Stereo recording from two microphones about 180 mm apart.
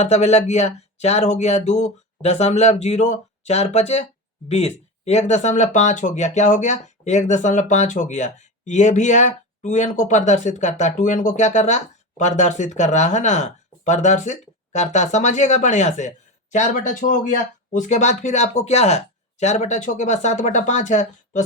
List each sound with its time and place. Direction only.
0.0 s speech: 35° left (ahead or behind)